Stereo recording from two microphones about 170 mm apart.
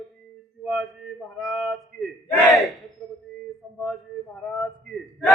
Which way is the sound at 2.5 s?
Centre (ahead or behind).